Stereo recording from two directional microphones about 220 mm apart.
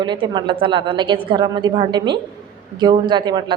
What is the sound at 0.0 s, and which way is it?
A woman's voice, 20° right (ahead or behind).